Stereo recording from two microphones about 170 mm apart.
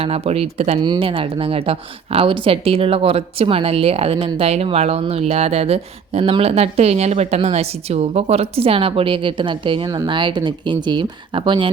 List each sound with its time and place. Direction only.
0.0 s speech: 35° right (ahead or behind)